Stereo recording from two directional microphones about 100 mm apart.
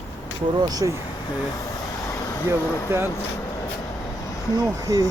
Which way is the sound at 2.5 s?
25° right (ahead or behind).